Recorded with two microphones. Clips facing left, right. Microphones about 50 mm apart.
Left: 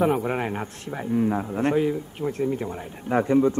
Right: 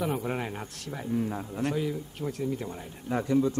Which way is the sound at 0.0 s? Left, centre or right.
Left.